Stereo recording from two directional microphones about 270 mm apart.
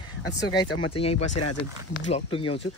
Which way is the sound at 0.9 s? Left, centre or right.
Left.